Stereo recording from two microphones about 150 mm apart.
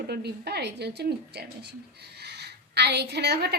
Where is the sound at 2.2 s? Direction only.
90° right.